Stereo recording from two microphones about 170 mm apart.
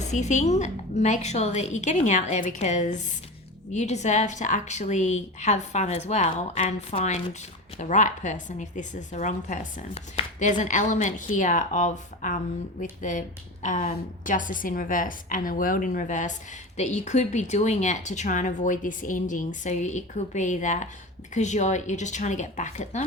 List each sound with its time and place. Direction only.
0.0 s speech: 45° left (ahead or behind)